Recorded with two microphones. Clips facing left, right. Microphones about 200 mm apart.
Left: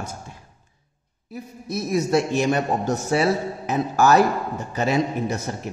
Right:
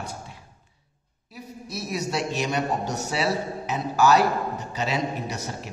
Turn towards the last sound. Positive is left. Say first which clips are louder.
# left 5 dB
turn(degrees=50)  # may be behind; listen again after turning